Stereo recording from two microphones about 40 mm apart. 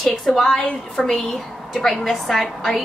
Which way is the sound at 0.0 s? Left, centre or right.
Centre.